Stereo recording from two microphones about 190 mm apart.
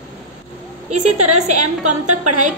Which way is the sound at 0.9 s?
35° right (ahead or behind).